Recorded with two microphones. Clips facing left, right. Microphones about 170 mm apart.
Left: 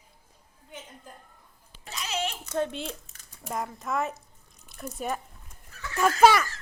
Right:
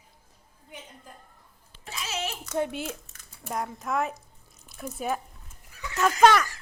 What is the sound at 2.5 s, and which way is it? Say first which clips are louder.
A woman's voice: right 2 dB; 10° right (ahead or behind).